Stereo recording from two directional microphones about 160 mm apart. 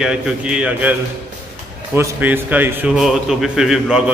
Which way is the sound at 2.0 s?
10° right (ahead or behind).